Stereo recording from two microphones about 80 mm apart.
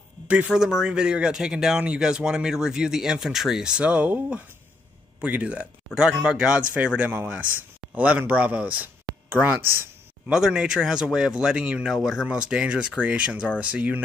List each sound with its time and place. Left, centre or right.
0.5 s speech: centre; by 9.7 s right
10.2 s speech: centre